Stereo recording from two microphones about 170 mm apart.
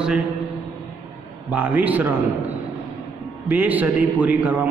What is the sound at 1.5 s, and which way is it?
Speech, 10° right (ahead or behind).